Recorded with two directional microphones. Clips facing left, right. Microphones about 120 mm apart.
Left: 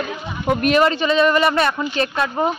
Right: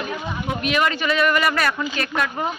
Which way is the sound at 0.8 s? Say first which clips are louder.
Left 4 dB; 25° left (ahead or behind).